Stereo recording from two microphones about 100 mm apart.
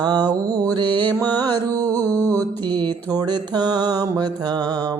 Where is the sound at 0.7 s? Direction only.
50° right (ahead or behind).